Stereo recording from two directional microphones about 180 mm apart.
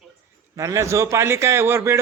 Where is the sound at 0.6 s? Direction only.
15° right (ahead or behind).